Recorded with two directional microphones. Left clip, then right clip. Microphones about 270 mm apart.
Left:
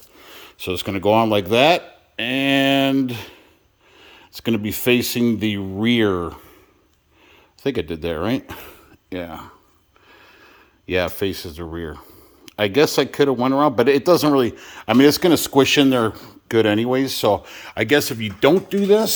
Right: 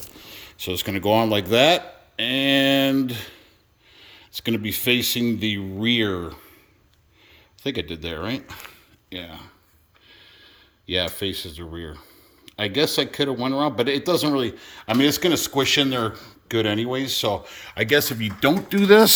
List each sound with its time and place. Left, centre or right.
0.2 s a man's voice: centre
7.6 s speech: centre
10.1 s a sound: centre
12.5 s speech: centre